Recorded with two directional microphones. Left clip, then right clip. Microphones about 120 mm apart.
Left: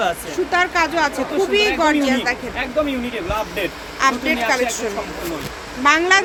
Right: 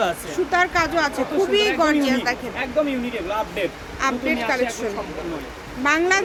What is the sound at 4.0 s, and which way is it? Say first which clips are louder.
Speech: left 5 dB; 10° left (ahead or behind).